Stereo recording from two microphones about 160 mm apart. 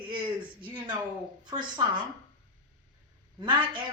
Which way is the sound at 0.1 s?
30° right (ahead or behind).